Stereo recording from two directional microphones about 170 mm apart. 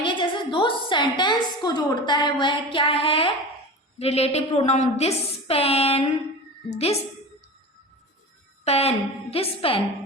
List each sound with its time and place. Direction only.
0.0 s a woman's voice: 30° left (ahead or behind)
8.6 s a woman's voice: 35° left (ahead or behind)